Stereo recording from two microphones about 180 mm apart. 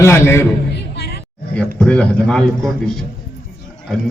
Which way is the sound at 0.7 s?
65° left (ahead or behind).